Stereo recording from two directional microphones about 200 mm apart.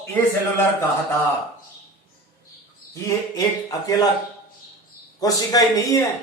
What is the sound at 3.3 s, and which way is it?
Speech, 20° left (ahead or behind).